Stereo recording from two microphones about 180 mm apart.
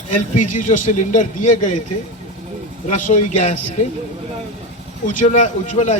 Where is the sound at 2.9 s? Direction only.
45° left (ahead or behind).